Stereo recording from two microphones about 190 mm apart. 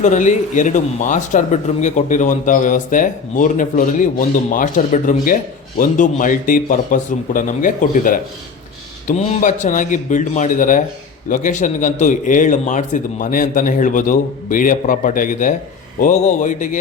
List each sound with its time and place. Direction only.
0.0 s a man's voice: 40° left (ahead or behind)